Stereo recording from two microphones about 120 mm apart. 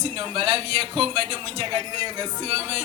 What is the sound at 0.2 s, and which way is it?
A man's voice, 40° right (ahead or behind).